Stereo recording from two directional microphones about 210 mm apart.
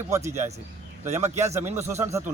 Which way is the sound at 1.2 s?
30° right (ahead or behind).